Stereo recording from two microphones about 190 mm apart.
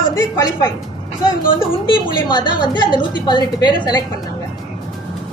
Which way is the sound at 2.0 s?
25° left (ahead or behind).